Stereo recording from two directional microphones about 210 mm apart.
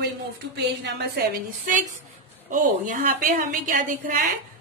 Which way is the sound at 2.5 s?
40° right (ahead or behind).